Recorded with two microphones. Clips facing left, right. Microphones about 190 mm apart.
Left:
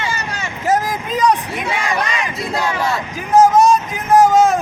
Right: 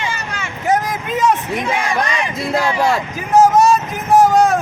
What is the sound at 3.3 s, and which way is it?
Vehicle, centre (ahead or behind).